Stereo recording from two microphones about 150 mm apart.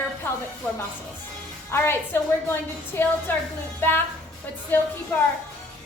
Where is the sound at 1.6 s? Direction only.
15° left (ahead or behind).